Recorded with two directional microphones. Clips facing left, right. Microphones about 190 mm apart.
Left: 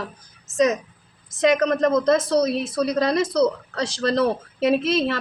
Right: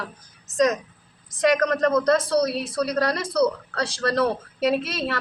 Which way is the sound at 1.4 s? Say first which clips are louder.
Left 2 dB; 20° left (ahead or behind).